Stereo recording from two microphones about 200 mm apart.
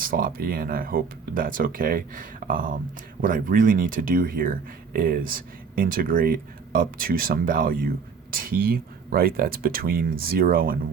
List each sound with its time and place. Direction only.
0.0 s speech: 45° right (ahead or behind)